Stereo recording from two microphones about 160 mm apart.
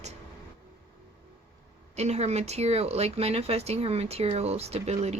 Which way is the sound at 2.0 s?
45° right (ahead or behind).